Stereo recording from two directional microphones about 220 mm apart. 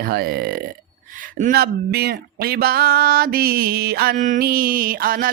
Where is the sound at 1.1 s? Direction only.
35° right (ahead or behind).